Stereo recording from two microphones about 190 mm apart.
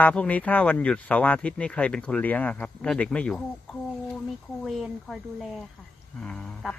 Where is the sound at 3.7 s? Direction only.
Centre (ahead or behind).